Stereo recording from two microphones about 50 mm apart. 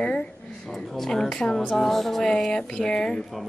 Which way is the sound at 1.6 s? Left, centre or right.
Centre.